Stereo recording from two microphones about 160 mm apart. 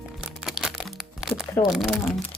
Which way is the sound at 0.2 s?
5° right (ahead or behind).